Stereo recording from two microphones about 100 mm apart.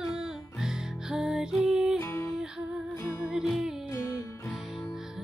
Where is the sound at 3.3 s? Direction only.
5° right (ahead or behind).